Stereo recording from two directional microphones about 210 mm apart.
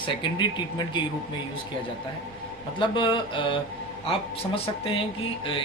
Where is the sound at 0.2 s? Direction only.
20° left (ahead or behind).